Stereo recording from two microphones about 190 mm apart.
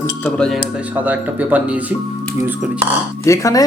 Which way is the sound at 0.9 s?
10° right (ahead or behind).